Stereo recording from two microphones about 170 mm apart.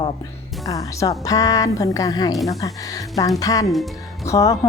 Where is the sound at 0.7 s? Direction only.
20° left (ahead or behind).